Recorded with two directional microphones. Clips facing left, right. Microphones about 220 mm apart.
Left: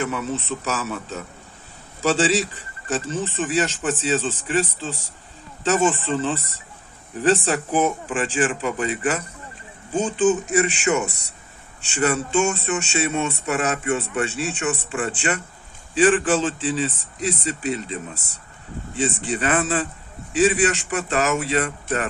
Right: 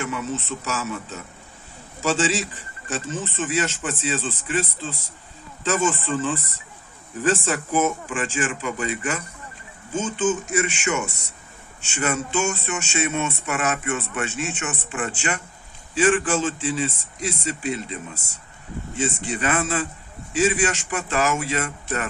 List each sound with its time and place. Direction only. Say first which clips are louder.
0.0 s speech: left 2 dB; 35° left (ahead or behind)
2.9 s speech: left 4 dB; 35° left (ahead or behind)
18.1 s speech: left 1 dB; 40° right (ahead or behind)
19.3 s speech: left 2 dB; 35° left (ahead or behind)